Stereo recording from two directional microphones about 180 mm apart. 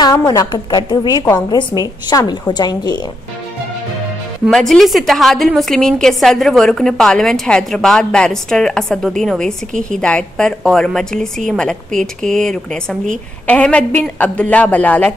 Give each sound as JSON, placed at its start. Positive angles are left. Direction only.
{"t": 0.0, "sound": "a woman's voice", "side_deg": 20}
{"t": 4.5, "sound": "a woman's voice", "side_deg": 0}